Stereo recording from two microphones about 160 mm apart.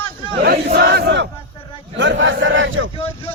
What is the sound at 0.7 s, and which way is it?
Battle cry, 90° right.